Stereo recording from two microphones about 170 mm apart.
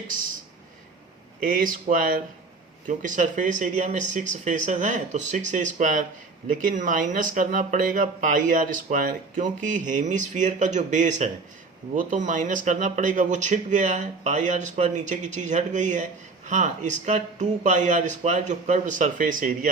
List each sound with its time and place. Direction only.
1.4 s speech: 55° right (ahead or behind)